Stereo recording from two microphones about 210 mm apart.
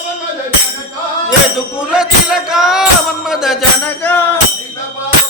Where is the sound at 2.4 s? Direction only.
5° right (ahead or behind).